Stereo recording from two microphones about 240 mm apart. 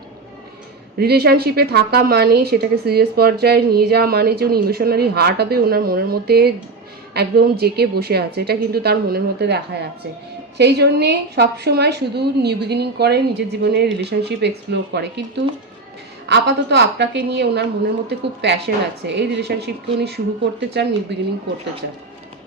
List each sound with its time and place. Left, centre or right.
0.9 s a woman's voice: right
10.6 s a woman's voice: right